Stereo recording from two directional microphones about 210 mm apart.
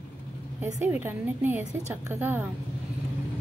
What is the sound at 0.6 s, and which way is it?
A woman's voice, 10° right (ahead or behind).